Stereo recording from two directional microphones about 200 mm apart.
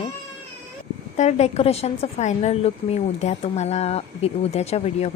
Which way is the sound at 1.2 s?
35° left (ahead or behind).